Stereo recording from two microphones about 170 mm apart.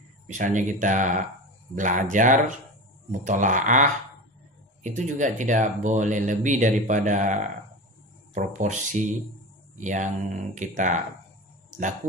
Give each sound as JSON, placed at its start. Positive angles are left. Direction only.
{"t": 0.3, "sound": "speech", "side_deg": -50}
{"t": 8.4, "sound": "speech", "side_deg": -45}